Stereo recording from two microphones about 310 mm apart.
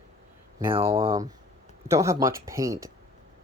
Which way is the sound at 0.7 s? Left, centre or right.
Centre.